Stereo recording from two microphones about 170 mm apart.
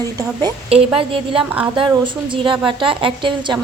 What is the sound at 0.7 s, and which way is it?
A woman's voice, 35° right (ahead or behind).